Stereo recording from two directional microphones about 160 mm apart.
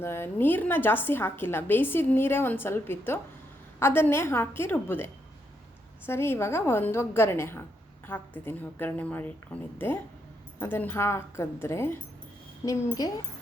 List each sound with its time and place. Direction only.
0.0 s a woman's voice: 15° left (ahead or behind)